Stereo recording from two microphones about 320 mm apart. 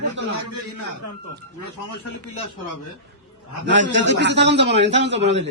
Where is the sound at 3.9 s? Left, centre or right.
Right.